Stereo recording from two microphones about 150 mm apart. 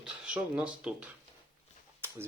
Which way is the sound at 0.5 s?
5° right (ahead or behind).